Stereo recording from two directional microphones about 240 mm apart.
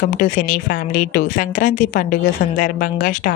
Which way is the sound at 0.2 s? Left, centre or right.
Left.